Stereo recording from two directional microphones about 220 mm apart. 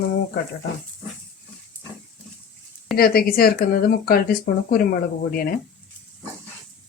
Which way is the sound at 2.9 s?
45° left (ahead or behind).